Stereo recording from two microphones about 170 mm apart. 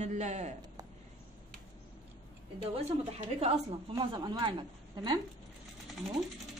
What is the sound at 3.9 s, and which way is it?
Speech, 25° right (ahead or behind).